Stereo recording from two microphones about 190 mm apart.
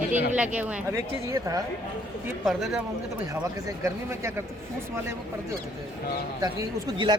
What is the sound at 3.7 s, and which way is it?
Speech, 15° right (ahead or behind).